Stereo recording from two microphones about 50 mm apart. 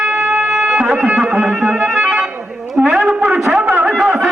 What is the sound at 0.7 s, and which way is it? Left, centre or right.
Music, right.